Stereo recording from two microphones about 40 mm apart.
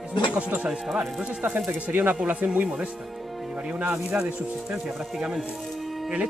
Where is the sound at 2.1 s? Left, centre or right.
Right.